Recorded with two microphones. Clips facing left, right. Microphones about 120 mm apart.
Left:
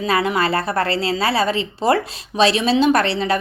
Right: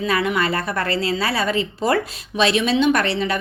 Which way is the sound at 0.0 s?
30° left (ahead or behind).